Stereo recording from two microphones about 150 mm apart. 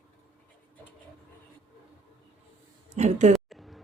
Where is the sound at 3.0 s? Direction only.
50° right (ahead or behind).